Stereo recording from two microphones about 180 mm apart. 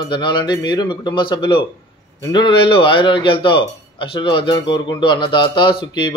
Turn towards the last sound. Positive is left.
turn(degrees=25)  # may be behind; listen again after turning